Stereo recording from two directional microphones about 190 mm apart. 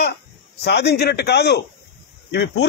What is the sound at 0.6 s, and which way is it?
Speech, 60° left (ahead or behind).